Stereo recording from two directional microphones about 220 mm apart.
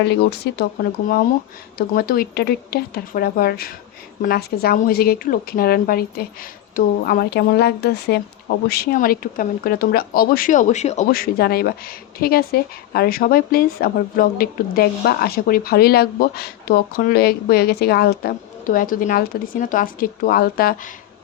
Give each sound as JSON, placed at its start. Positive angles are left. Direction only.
{"t": 0.0, "sound": "speech", "side_deg": 50}
{"t": 2.0, "sound": "speech", "side_deg": 45}